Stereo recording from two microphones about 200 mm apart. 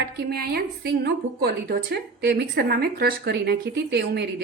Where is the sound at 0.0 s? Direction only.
50° right (ahead or behind).